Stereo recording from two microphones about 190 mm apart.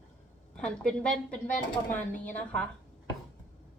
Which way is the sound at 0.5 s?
5° left (ahead or behind).